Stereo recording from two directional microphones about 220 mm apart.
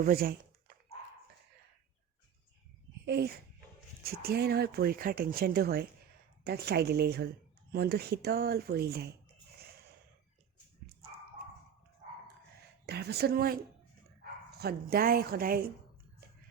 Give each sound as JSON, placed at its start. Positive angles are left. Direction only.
{"t": 0.0, "sound": "speech", "side_deg": -40}
{"t": 3.1, "sound": "speech", "side_deg": -45}
{"t": 12.8, "sound": "speech", "side_deg": -50}
{"t": 14.6, "sound": "speech", "side_deg": -45}